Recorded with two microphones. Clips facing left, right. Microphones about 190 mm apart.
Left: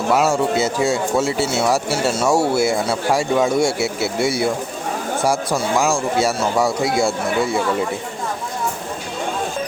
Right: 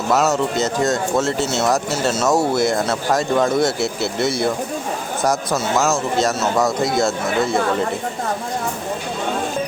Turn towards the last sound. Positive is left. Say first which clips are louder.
# right 1 dB
turn(degrees=10)  # may be behind; listen again after turning